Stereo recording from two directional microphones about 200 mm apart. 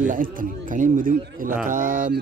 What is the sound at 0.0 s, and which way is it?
Speech, 40° right (ahead or behind).